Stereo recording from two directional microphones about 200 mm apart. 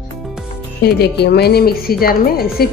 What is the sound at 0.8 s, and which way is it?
Speech, 50° left (ahead or behind).